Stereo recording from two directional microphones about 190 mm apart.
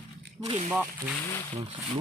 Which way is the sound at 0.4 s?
30° right (ahead or behind).